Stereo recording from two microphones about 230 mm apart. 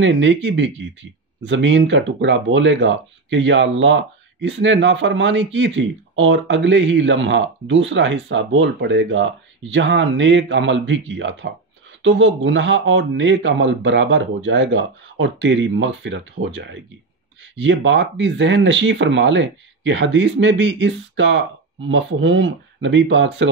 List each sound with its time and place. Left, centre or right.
0.0 s speech: right